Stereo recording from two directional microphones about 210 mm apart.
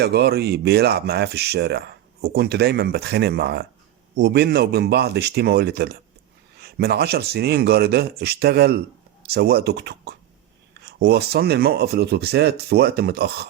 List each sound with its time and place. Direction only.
0.0 s speech: 50° right (ahead or behind)